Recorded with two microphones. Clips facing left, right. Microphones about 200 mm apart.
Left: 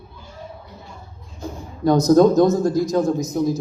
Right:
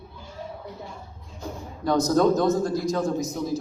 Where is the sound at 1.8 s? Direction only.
45° left (ahead or behind).